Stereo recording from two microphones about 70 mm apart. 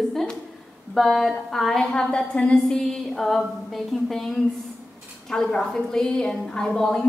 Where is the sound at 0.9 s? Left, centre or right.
Centre.